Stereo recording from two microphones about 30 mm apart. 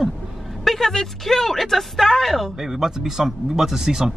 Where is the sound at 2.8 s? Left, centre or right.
Centre.